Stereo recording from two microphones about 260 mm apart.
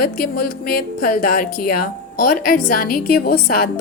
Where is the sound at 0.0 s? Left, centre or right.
Left.